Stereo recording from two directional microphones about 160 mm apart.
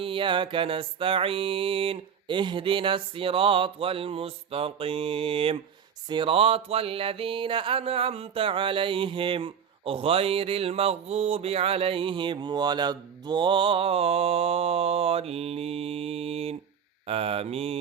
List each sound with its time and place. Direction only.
0.0 s music: 35° right (ahead or behind)